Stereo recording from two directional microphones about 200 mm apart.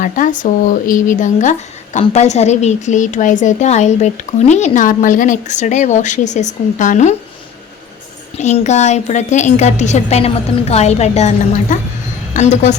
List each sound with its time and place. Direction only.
0.0 s speech: 40° left (ahead or behind)
8.4 s speech: 35° left (ahead or behind)